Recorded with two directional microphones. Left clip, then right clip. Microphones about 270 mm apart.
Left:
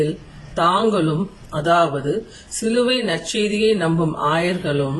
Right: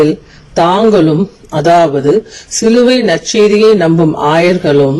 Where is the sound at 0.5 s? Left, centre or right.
Right.